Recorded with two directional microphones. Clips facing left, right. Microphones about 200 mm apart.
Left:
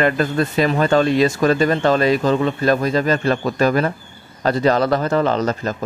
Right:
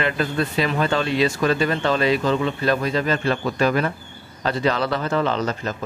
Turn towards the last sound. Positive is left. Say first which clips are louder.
# left 4 dB
turn(degrees=40)  # may be behind; listen again after turning